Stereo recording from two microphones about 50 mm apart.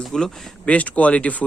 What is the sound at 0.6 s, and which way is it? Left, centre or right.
Speech, left.